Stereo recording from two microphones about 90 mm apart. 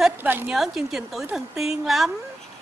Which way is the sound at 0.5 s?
5° right (ahead or behind).